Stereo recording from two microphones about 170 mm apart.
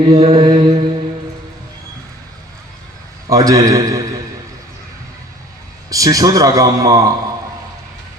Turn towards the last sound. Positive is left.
turn(degrees=-20)  # may be behind; listen again after turning